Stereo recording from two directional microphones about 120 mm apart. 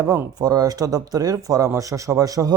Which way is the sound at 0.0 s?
30° right (ahead or behind).